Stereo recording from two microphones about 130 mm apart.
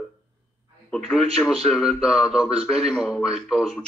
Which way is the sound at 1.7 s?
Centre (ahead or behind).